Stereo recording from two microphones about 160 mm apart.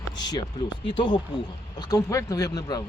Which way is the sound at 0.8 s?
30° left (ahead or behind).